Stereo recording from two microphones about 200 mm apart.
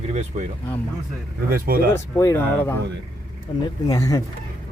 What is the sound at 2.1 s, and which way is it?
Speech, 15° left (ahead or behind).